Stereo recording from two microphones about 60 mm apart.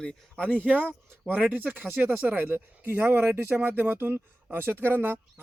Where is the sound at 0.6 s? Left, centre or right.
Right.